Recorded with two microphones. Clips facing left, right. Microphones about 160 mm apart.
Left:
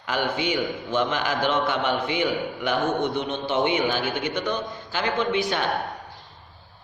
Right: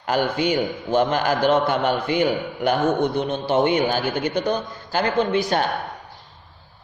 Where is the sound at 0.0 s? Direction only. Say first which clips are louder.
Right 5 dB; 40° right (ahead or behind).